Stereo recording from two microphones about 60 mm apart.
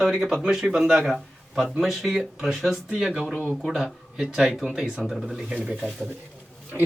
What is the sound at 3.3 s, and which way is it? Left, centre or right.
Speech, centre.